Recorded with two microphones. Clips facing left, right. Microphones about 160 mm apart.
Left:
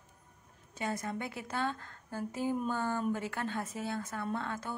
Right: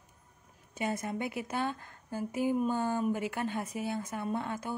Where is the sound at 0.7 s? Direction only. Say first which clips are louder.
Right 2 dB; 20° right (ahead or behind).